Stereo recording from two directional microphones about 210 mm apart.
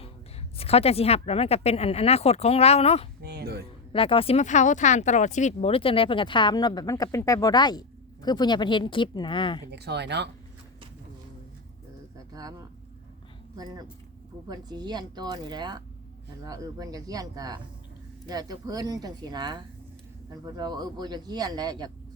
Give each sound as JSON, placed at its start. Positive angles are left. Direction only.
{"t": 0.5, "sound": "speech", "side_deg": 30}
{"t": 3.2, "sound": "a sound", "side_deg": -50}
{"t": 3.9, "sound": "speech", "side_deg": 25}
{"t": 9.7, "sound": "speech", "side_deg": -50}
{"t": 12.1, "sound": "a sound", "side_deg": -15}
{"t": 14.4, "sound": "speech", "side_deg": -20}